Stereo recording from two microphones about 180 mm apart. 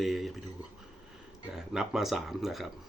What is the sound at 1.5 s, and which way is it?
Speech, 5° right (ahead or behind).